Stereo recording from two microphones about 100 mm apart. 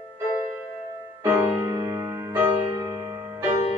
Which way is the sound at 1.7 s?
30° right (ahead or behind).